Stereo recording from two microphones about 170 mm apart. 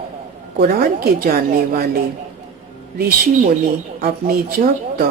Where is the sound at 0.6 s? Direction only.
60° right (ahead or behind).